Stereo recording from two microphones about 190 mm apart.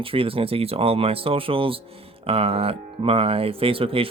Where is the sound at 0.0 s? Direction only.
30° right (ahead or behind).